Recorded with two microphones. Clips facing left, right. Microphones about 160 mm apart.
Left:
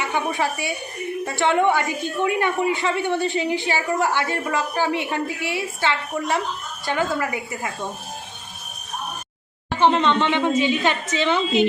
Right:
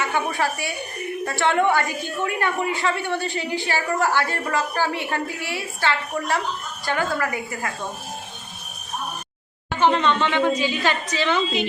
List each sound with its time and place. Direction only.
0.0 s a woman's voice: 20° left (ahead or behind)
9.8 s a woman's voice: 25° left (ahead or behind)